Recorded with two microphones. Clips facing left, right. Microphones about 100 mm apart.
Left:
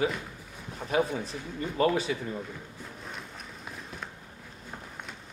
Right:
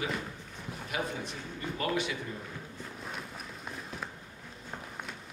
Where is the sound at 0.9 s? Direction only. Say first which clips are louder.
Left 8 dB; 35° left (ahead or behind).